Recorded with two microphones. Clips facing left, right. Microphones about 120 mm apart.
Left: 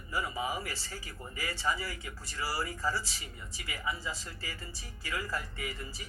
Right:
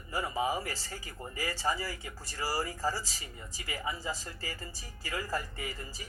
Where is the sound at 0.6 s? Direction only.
45° right (ahead or behind).